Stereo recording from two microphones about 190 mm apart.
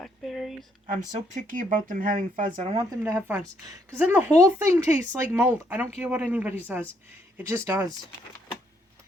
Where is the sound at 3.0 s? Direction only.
15° right (ahead or behind).